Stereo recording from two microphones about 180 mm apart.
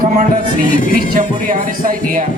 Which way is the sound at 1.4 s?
50° right (ahead or behind).